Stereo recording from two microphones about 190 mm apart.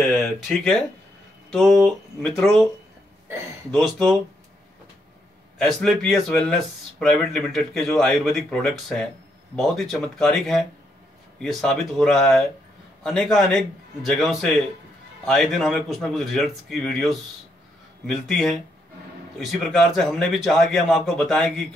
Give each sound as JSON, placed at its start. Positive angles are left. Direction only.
{"t": 0.0, "sound": "speech", "side_deg": 5}
{"t": 3.7, "sound": "speech", "side_deg": 0}
{"t": 5.6, "sound": "speech", "side_deg": 0}